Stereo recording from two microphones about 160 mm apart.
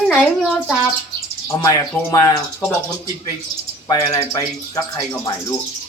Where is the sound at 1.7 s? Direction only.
25° left (ahead or behind).